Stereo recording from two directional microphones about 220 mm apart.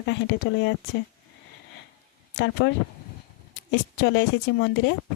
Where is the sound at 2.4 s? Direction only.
55° left (ahead or behind).